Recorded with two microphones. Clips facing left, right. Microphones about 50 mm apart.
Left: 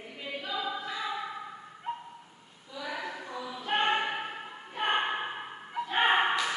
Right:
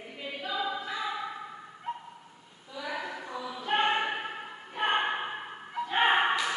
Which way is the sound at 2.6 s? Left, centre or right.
Centre.